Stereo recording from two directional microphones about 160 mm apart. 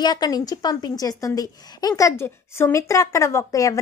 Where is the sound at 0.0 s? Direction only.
25° left (ahead or behind).